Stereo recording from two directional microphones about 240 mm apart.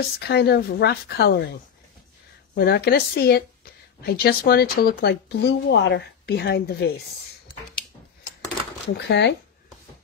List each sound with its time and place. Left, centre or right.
0.3 s speech: left
2.5 s speech: left
8.8 s speech: left